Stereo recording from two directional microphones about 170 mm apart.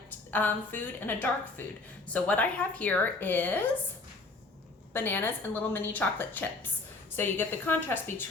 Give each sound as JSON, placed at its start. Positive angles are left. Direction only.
{"t": 0.3, "sound": "a woman's voice", "side_deg": 10}
{"t": 4.9, "sound": "a woman's voice", "side_deg": 10}